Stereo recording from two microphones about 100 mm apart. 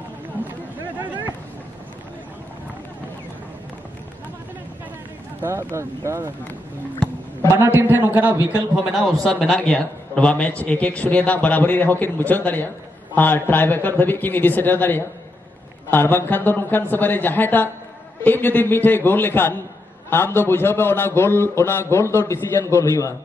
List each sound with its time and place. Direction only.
5.4 s speech: 25° right (ahead or behind)
7.5 s a man's voice: 20° right (ahead or behind)
8.7 s a man's voice: 5° right (ahead or behind)
9.2 s a man's voice: 10° left (ahead or behind); by 23.1 s 30° left (ahead or behind)